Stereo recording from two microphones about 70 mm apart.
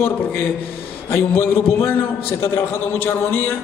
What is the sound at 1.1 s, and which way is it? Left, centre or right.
A man's voice, left.